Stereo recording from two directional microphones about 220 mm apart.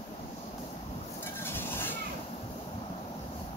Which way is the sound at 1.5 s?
10° left (ahead or behind).